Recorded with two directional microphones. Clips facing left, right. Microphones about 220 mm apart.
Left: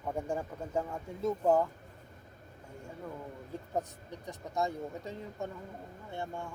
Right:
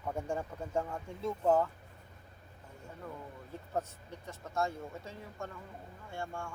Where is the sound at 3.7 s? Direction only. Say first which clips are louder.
Left 1 dB; 15° left (ahead or behind).